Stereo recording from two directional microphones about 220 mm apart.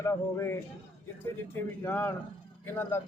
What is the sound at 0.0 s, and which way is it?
Speech, 10° left (ahead or behind).